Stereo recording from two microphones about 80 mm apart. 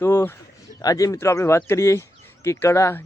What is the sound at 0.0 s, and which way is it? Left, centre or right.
Speech, left.